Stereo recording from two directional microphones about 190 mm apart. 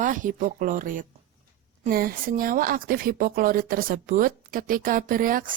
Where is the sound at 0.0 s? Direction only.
45° right (ahead or behind).